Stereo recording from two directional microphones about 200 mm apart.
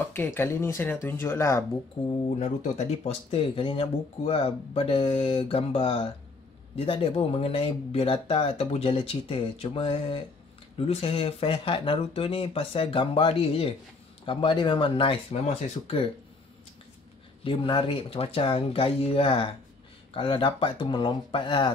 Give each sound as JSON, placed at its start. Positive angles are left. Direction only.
{"t": 0.0, "sound": "speech", "side_deg": 10}
{"t": 2.0, "sound": "speech", "side_deg": 35}
{"t": 17.4, "sound": "speech", "side_deg": 25}